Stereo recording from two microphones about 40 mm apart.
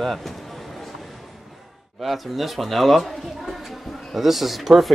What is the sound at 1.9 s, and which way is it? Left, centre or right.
Speech, centre.